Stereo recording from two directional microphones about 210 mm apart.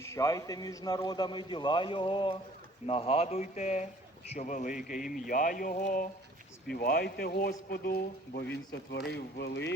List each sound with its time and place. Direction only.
0.0 s a man's voice: 15° left (ahead or behind); by 9.7 s 55° left (ahead or behind)